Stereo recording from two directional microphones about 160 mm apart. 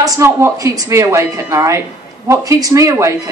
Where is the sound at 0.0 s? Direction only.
20° right (ahead or behind).